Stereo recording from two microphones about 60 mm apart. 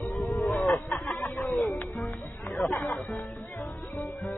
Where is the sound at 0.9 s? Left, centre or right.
Centre.